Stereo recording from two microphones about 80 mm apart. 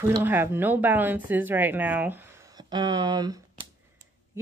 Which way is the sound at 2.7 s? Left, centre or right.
Right.